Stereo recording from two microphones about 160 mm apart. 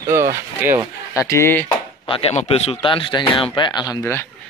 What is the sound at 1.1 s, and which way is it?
Speech, 20° left (ahead or behind).